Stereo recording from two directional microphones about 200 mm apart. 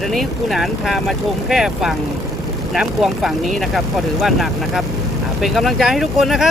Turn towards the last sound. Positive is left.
turn(degrees=0)  # may be behind; listen again after turning